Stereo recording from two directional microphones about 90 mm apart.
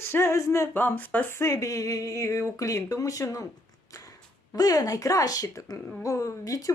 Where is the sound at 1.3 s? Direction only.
30° left (ahead or behind).